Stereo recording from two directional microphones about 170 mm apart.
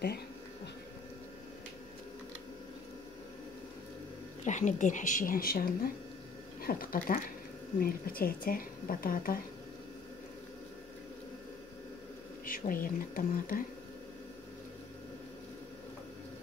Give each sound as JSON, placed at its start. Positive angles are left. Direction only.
{"t": 4.5, "sound": "speech", "side_deg": 45}
{"t": 12.4, "sound": "speech", "side_deg": 55}